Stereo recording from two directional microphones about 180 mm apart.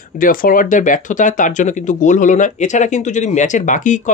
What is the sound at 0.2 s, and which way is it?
Speech, 50° left (ahead or behind).